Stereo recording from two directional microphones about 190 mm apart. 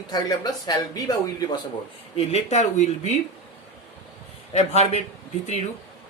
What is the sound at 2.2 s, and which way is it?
Speech, 35° left (ahead or behind).